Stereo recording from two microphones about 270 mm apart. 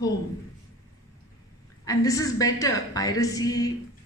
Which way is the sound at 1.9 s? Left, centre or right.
Centre.